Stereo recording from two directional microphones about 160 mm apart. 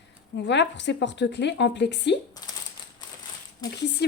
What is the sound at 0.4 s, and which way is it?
Speech, 90° left.